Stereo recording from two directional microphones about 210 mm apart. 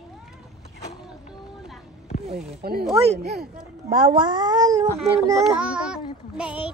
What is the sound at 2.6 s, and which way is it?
Speech, 45° right (ahead or behind).